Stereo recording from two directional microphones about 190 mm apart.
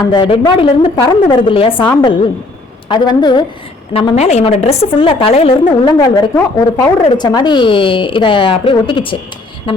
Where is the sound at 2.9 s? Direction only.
25° left (ahead or behind).